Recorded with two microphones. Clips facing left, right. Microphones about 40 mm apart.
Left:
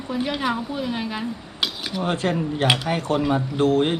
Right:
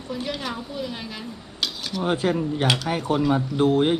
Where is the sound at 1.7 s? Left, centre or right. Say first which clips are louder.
Left 1 dB; centre.